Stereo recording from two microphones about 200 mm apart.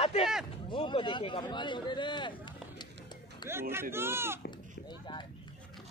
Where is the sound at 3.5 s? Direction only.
10° right (ahead or behind).